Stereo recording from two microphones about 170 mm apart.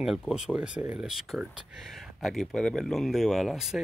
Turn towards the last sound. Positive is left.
turn(degrees=-5)  # may be behind; listen again after turning